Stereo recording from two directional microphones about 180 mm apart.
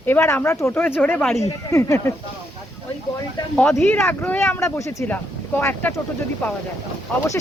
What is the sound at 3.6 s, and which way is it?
Speech, 5° left (ahead or behind).